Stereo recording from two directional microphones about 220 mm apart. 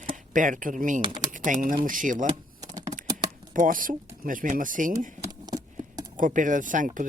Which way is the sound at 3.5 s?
40° right (ahead or behind).